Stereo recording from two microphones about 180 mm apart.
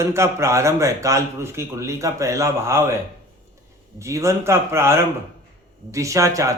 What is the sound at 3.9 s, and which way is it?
A man's voice, 15° right (ahead or behind).